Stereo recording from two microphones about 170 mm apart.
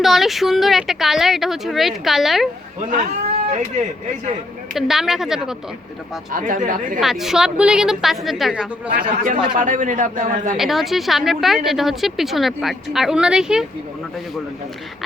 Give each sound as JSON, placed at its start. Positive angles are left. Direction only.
{"t": 0.0, "sound": "a woman's voice", "side_deg": 0}
{"t": 4.7, "sound": "a woman's voice", "side_deg": 0}
{"t": 6.3, "sound": "a man's voice", "side_deg": -50}
{"t": 7.0, "sound": "a woman's voice", "side_deg": 0}
{"t": 8.9, "sound": "a man's voice", "side_deg": -55}
{"t": 10.6, "sound": "a woman's voice", "side_deg": 0}